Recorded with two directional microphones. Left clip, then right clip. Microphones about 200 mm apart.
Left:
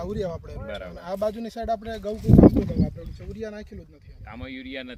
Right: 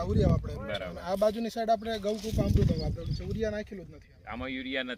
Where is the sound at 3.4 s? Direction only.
40° right (ahead or behind).